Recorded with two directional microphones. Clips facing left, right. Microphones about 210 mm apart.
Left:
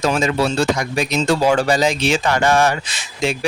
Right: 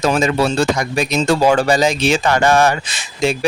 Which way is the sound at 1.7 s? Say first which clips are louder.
Right 2 dB; 40° right (ahead or behind).